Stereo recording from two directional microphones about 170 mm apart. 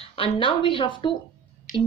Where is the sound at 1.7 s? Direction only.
55° left (ahead or behind).